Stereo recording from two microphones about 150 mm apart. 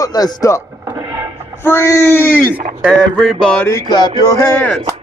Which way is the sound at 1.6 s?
15° left (ahead or behind).